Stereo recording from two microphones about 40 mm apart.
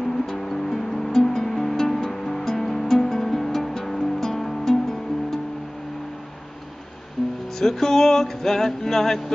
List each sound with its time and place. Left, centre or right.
0.0 s music: centre
7.5 s music: centre